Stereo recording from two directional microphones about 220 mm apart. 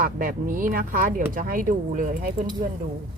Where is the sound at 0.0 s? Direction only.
40° right (ahead or behind).